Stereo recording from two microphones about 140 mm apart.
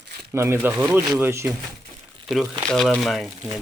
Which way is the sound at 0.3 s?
20° right (ahead or behind).